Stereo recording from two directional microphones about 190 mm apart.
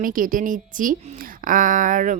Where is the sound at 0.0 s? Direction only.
45° right (ahead or behind).